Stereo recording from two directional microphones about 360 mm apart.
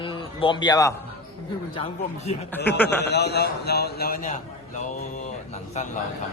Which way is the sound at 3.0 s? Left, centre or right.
Left.